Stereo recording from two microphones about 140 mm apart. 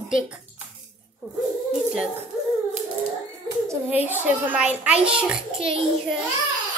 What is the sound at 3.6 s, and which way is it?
A child's voice, 15° right (ahead or behind).